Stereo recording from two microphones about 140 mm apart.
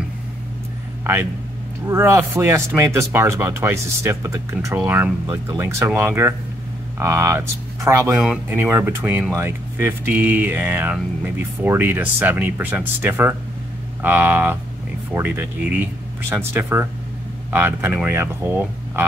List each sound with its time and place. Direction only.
1.9 s speech: 20° right (ahead or behind)